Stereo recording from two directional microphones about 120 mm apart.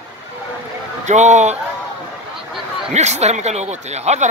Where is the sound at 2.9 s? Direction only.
70° right (ahead or behind).